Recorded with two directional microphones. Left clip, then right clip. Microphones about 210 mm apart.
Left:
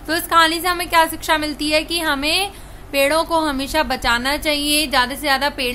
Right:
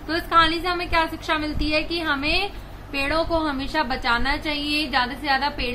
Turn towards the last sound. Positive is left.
turn(degrees=50)  # may be behind; listen again after turning